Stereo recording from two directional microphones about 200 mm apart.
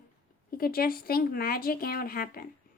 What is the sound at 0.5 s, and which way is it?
Speech, 50° left (ahead or behind).